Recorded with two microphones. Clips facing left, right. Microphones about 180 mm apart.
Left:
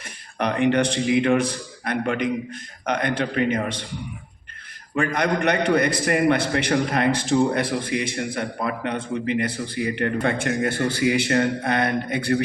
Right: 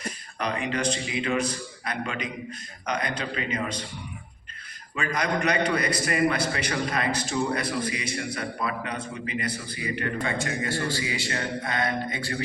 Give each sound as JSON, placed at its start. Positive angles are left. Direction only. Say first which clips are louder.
{"t": 0.3, "sound": "a man's voice", "louder": "left 9 dB", "side_deg": 65}
{"t": 4.9, "sound": "a man's voice", "louder": "left 5 dB", "side_deg": 60}